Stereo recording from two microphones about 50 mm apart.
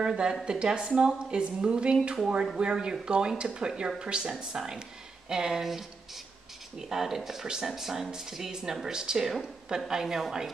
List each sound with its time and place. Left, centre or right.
0.0 s speech: centre